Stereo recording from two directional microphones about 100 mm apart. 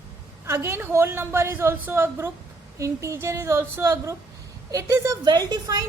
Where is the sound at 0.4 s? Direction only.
25° right (ahead or behind).